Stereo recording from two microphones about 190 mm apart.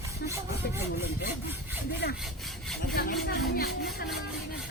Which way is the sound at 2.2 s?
Centre (ahead or behind).